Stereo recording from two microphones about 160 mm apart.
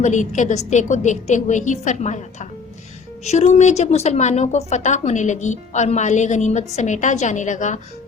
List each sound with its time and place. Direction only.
0.0 s a woman's voice: 50° left (ahead or behind)